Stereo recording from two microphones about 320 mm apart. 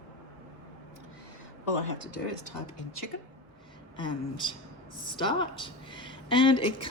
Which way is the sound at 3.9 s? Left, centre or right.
Centre.